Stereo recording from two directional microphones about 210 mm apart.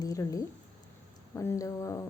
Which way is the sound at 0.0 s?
15° left (ahead or behind).